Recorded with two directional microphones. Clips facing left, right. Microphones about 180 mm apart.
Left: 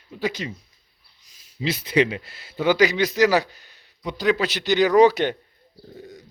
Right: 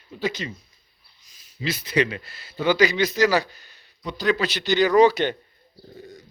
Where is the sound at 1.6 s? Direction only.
25° left (ahead or behind).